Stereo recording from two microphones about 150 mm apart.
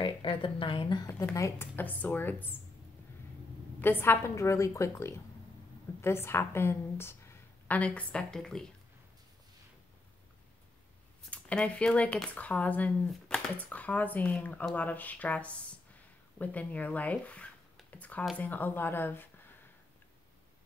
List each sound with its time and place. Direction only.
0.0 s a woman's voice: 35° left (ahead or behind)
1.3 s speech: 20° left (ahead or behind)
3.8 s a woman's voice: 15° left (ahead or behind)
11.2 s speech: 10° left (ahead or behind)